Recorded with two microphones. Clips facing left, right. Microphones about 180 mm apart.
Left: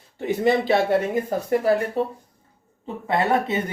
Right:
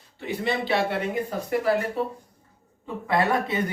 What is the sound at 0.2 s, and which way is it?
Speech, 45° left (ahead or behind).